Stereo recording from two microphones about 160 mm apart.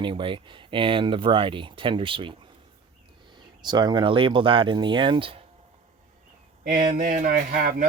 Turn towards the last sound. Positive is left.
turn(degrees=-60)  # may be behind; listen again after turning